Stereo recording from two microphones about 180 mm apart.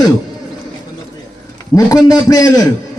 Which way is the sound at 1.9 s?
20° left (ahead or behind).